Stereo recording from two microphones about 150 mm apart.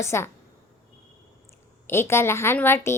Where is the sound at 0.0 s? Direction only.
15° left (ahead or behind).